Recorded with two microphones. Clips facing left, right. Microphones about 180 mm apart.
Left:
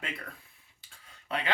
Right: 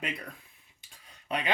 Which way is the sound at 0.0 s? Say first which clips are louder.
Right 3 dB; 15° right (ahead or behind).